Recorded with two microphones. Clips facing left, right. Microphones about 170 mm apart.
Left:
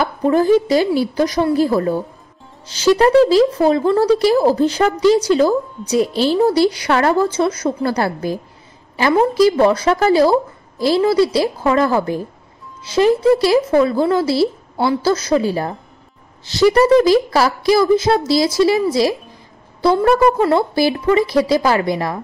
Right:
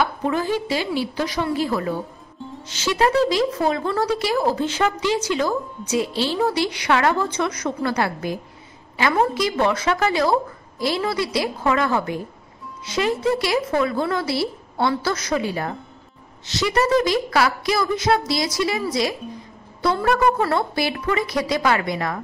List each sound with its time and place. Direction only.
0.3 s a woman's voice: 40° left (ahead or behind)